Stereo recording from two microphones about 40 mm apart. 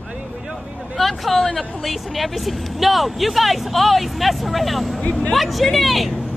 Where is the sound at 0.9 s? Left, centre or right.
Centre.